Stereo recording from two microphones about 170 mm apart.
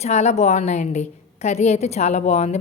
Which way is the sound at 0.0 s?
40° left (ahead or behind).